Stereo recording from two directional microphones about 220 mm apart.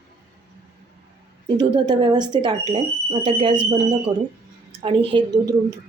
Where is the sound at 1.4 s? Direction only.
20° right (ahead or behind).